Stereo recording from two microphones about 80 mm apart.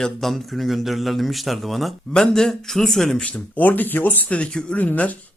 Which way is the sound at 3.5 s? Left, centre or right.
Left.